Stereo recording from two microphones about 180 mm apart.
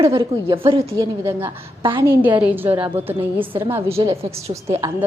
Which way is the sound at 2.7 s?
30° right (ahead or behind).